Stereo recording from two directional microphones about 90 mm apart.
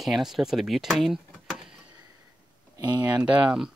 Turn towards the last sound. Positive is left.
turn(degrees=-10)  # may be behind; listen again after turning